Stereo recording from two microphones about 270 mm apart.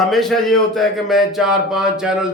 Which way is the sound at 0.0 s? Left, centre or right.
Centre.